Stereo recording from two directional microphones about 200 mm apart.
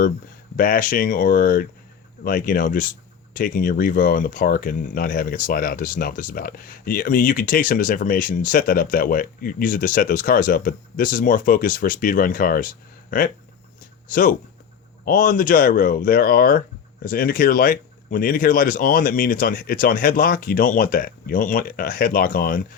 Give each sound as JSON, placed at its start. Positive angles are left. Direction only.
{"t": 0.5, "sound": "speech", "side_deg": 45}